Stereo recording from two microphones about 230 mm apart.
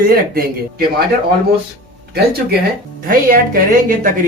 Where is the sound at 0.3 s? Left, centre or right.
Right.